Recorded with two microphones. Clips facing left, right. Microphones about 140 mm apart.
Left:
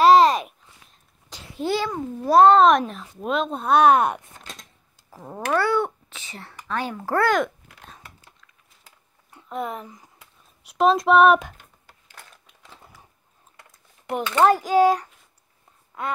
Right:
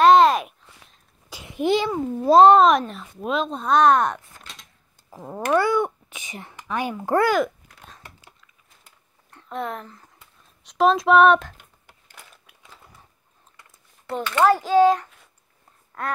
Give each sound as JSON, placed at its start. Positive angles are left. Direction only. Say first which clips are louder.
{"t": 0.0, "sound": "babbling", "louder": "even", "side_deg": 0}
{"t": 1.3, "sound": "a sound", "louder": "right 4 dB", "side_deg": -15}
{"t": 2.2, "sound": "a child's voice", "louder": "right 2 dB", "side_deg": -20}
{"t": 2.8, "sound": "a woman's voice", "louder": "left 1 dB", "side_deg": 0}
{"t": 5.2, "sound": "speech", "louder": "right 2 dB", "side_deg": -10}
{"t": 7.3, "sound": "a sound", "louder": "right 1 dB", "side_deg": -5}
{"t": 9.3, "sound": "speech", "louder": "even", "side_deg": 5}
{"t": 9.8, "sound": "speech", "louder": "left 1 dB", "side_deg": 15}
{"t": 14.0, "sound": "a woman's voice", "louder": "left 1 dB", "side_deg": 15}
{"t": 15.9, "sound": "a sound", "louder": "even", "side_deg": 10}